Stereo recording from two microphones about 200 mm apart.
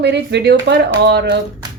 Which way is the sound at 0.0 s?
55° right (ahead or behind).